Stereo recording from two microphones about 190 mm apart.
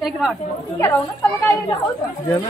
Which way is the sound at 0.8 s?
10° left (ahead or behind).